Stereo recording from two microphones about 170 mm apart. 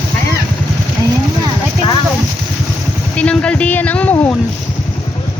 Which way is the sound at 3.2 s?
5° left (ahead or behind).